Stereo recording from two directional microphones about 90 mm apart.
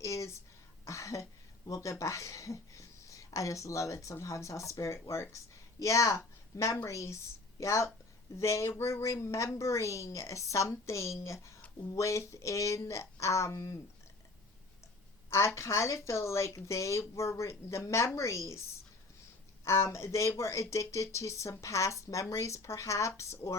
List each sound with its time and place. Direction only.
0.0 s a sound: 35° left (ahead or behind)
0.9 s speech: 35° left (ahead or behind)
15.3 s speech: 35° left (ahead or behind)
19.6 s speech: 30° left (ahead or behind)